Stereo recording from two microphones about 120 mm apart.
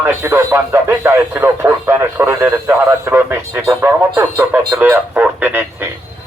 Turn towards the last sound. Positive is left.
turn(degrees=-15)  # may be behind; listen again after turning